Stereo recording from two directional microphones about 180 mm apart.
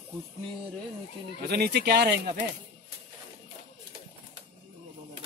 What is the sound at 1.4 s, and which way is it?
Speech, 60° right (ahead or behind).